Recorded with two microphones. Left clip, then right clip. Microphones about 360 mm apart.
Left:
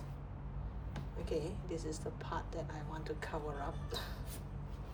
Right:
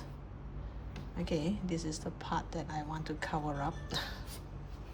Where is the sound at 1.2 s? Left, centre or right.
Right.